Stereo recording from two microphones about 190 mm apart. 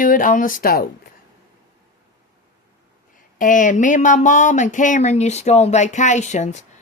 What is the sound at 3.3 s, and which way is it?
Speech, 45° left (ahead or behind).